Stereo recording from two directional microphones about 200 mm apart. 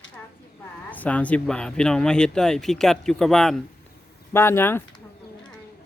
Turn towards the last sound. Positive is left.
turn(degrees=10)  # may be behind; listen again after turning